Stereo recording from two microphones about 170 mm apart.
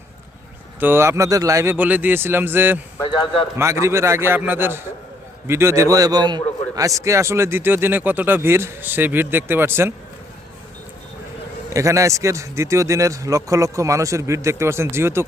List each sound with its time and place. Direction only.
0.8 s a man's voice: 15° right (ahead or behind)
3.1 s a man's voice: 30° left (ahead or behind)
3.6 s a man's voice: 15° right (ahead or behind)
11.7 s a man's voice: 20° right (ahead or behind)